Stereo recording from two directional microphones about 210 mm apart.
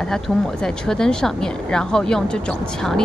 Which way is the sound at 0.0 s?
5° left (ahead or behind).